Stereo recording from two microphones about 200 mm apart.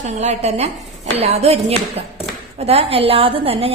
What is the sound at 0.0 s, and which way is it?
A woman's voice, 35° right (ahead or behind).